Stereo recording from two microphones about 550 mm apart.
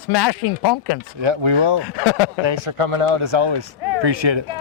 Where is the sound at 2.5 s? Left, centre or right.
Right.